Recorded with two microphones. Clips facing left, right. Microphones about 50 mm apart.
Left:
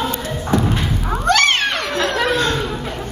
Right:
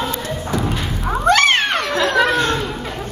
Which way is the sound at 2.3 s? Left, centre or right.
Right.